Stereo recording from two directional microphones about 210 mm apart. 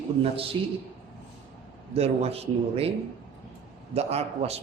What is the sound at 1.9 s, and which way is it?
A man's voice, 30° right (ahead or behind).